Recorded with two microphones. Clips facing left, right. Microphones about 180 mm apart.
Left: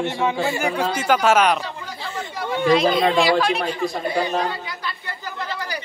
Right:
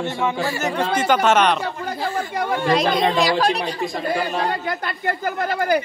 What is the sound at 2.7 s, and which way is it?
Speech, 40° right (ahead or behind).